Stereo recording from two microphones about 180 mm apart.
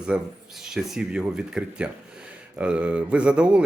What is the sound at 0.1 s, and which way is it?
Speech, 5° right (ahead or behind).